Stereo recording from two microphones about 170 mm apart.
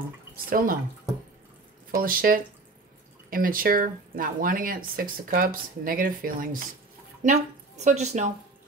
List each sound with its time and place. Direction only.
0.5 s speech: 55° right (ahead or behind)
2.0 s speech: 55° right (ahead or behind)
7.2 s speech: 45° right (ahead or behind)